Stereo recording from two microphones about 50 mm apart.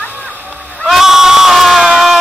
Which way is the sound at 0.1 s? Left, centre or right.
Right.